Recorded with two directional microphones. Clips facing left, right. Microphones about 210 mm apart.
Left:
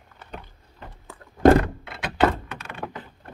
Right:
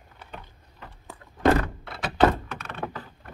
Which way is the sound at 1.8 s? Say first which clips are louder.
Right 1 dB; 5° left (ahead or behind).